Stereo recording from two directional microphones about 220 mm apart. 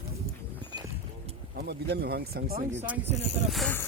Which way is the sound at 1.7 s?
50° right (ahead or behind).